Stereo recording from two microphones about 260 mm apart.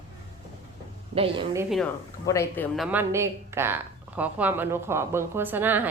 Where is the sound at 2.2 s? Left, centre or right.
Centre.